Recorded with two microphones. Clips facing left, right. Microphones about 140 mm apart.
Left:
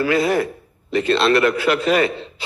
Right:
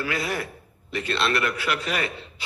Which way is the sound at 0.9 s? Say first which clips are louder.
Left 9 dB; 90° left.